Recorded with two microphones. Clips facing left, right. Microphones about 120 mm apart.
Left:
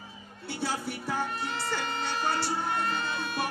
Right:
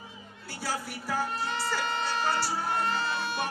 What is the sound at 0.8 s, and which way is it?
Music, centre (ahead or behind).